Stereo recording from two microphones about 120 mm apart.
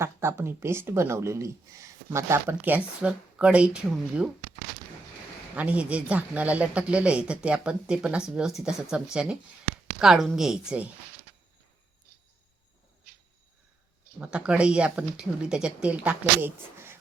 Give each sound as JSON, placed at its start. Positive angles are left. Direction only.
{"t": 0.0, "sound": "speech", "side_deg": -20}
{"t": 5.5, "sound": "speech", "side_deg": -10}
{"t": 14.2, "sound": "speech", "side_deg": -10}